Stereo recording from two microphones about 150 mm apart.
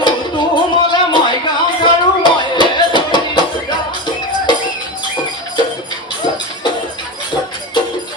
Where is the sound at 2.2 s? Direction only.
30° left (ahead or behind).